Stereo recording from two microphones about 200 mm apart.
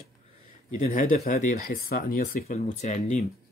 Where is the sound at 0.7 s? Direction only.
40° left (ahead or behind).